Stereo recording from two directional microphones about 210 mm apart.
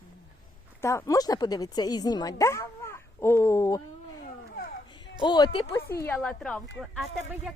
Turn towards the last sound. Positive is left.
turn(degrees=0)  # may be behind; listen again after turning